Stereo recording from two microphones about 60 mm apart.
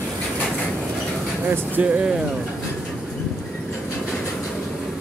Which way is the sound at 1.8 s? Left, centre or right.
Centre.